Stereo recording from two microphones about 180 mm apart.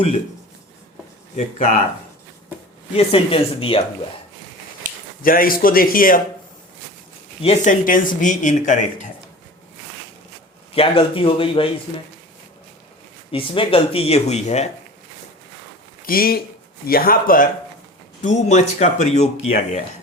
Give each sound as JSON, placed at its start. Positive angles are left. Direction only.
{"t": 1.4, "sound": "speech", "side_deg": 45}
{"t": 2.9, "sound": "speech", "side_deg": 30}
{"t": 4.8, "sound": "a sound", "side_deg": -50}
{"t": 5.2, "sound": "speech", "side_deg": 50}
{"t": 7.4, "sound": "speech", "side_deg": 40}
{"t": 10.8, "sound": "speech", "side_deg": 30}
{"t": 13.3, "sound": "speech", "side_deg": 30}
{"t": 16.0, "sound": "speech", "side_deg": 55}